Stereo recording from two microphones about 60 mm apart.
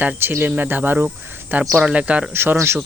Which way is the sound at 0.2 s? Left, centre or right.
Right.